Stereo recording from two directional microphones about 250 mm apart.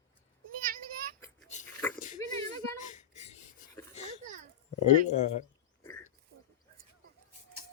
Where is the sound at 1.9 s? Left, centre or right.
Left.